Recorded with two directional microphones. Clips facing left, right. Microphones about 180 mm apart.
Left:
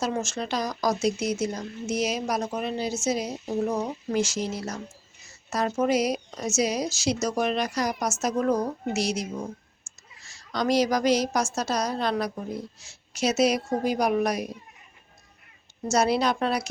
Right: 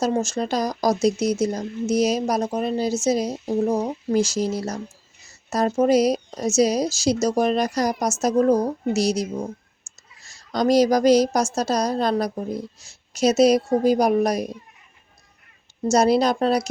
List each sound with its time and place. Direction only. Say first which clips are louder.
0.0 s speech: right 6 dB; 35° right (ahead or behind)
15.9 s speech: right 5 dB; 40° right (ahead or behind)